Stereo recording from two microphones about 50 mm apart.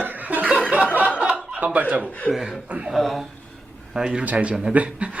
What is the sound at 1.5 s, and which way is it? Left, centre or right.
Speech, right.